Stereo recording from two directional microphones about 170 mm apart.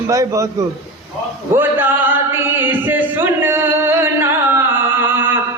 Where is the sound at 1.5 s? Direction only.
10° right (ahead or behind).